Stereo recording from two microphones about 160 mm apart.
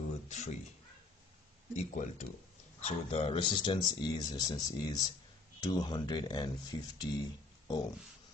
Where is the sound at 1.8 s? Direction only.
50° left (ahead or behind); by 7.1 s 25° left (ahead or behind).